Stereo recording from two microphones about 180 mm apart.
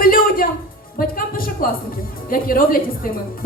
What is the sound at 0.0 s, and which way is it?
Music, 55° left (ahead or behind).